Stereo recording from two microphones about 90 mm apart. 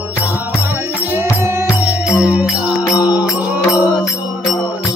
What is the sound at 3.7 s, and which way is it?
Mantra, 50° left (ahead or behind).